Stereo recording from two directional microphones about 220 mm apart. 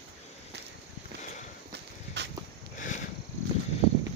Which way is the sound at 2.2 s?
50° right (ahead or behind).